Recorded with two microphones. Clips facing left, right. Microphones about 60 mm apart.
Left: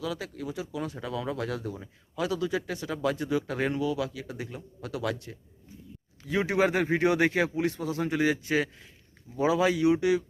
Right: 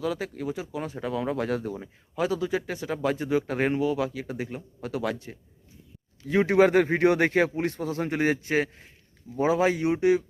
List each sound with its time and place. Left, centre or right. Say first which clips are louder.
0.0 s speech: right 4 dB; right
6.2 s speech: right 5 dB; right